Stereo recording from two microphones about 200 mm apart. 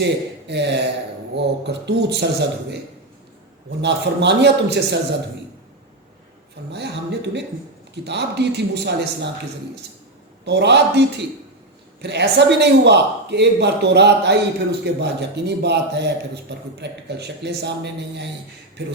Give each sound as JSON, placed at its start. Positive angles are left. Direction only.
{"t": 0.0, "sound": "speech", "side_deg": -60}
{"t": 3.8, "sound": "speech", "side_deg": -60}
{"t": 6.7, "sound": "speech", "side_deg": -60}
{"t": 10.4, "sound": "speech", "side_deg": -60}
{"t": 12.0, "sound": "speech", "side_deg": -60}